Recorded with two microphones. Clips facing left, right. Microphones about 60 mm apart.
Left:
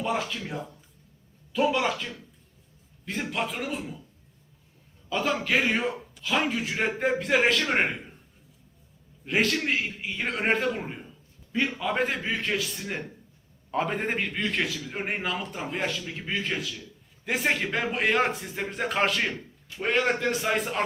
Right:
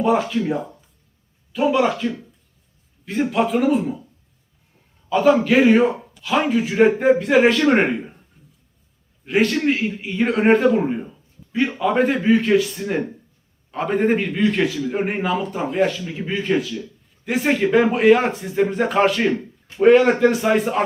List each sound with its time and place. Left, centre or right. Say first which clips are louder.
0.0 s speech: right 11 dB; centre
1.5 s a man's voice: right 7 dB; centre
5.0 s a man's voice: right 12 dB; centre
9.2 s a man's voice: right 7 dB; centre